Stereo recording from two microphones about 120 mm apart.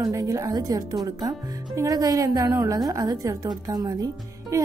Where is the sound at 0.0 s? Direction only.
30° right (ahead or behind).